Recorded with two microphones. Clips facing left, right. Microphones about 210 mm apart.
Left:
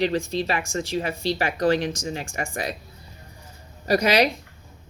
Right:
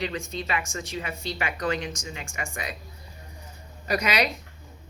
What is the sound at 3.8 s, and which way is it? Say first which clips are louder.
Speech: left 6 dB; 35° left (ahead or behind).